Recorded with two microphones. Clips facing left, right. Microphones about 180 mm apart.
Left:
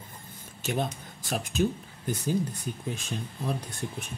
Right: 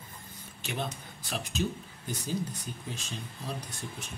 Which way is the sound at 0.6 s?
45° left (ahead or behind).